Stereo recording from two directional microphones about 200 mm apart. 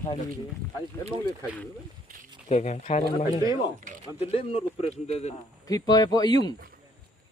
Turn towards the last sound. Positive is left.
turn(degrees=20)  # may be behind; listen again after turning